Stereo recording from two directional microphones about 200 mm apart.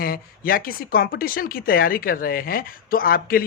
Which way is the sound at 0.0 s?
45° left (ahead or behind).